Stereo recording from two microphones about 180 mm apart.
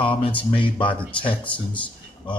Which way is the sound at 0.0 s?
30° left (ahead or behind).